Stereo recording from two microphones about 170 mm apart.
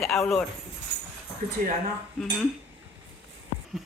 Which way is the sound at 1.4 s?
45° right (ahead or behind).